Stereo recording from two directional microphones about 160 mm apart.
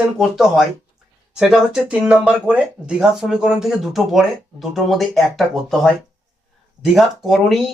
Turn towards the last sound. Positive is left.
turn(degrees=0)  # may be behind; listen again after turning